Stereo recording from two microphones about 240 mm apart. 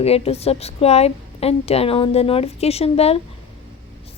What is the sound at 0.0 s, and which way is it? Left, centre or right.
A woman's voice, left.